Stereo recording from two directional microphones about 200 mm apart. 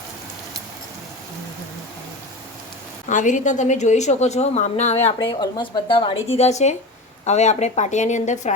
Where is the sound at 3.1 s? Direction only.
40° left (ahead or behind).